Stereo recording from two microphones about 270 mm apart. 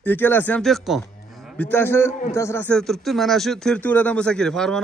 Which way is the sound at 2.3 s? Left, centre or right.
Centre.